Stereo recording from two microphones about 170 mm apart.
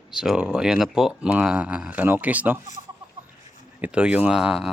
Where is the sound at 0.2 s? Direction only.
5° right (ahead or behind).